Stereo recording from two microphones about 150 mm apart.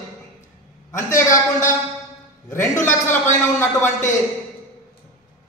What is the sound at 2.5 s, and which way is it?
A man's voice, 15° left (ahead or behind).